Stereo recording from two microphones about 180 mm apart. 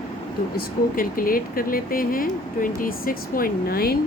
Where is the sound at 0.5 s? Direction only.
50° left (ahead or behind).